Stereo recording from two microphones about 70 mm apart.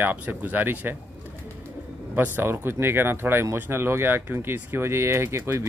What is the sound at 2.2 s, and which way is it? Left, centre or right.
Speech, right.